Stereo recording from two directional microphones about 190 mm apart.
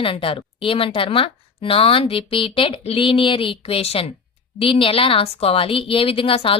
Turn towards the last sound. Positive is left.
turn(degrees=30)  # may be behind; listen again after turning